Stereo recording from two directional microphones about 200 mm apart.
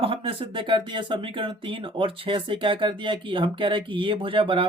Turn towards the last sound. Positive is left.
turn(degrees=-25)  # may be behind; listen again after turning